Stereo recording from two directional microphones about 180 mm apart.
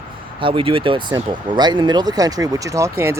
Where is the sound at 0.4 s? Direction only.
30° right (ahead or behind).